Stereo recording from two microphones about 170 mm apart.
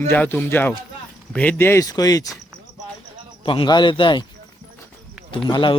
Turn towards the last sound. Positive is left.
turn(degrees=30)  # may be behind; listen again after turning